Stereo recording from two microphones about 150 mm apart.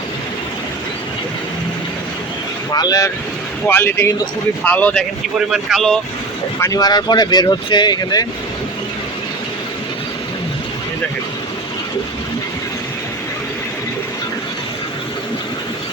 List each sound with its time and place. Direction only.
2.7 s speech: 25° left (ahead or behind)
3.7 s a man's voice: 15° left (ahead or behind)
6.6 s speech: 25° left (ahead or behind)